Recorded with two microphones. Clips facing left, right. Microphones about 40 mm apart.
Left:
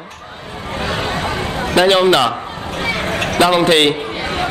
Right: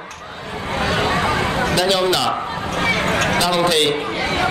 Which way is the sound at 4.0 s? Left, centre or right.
Right.